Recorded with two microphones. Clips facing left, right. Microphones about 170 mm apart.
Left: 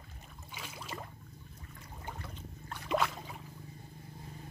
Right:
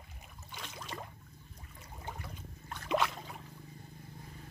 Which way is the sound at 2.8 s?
Centre (ahead or behind).